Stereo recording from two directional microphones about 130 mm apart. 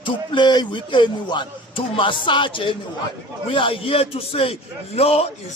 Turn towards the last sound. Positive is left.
turn(degrees=50)  # may be behind; listen again after turning